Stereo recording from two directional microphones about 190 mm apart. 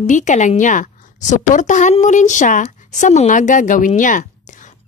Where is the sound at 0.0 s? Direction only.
40° left (ahead or behind).